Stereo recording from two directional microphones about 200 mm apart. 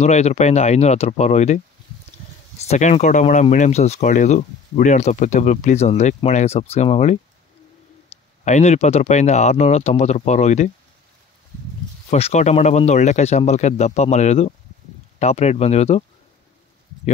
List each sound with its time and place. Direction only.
0.0 s speech: 35° left (ahead or behind)
2.7 s speech: 35° left (ahead or behind)
8.5 s speech: 35° left (ahead or behind)
12.1 s speech: 35° left (ahead or behind)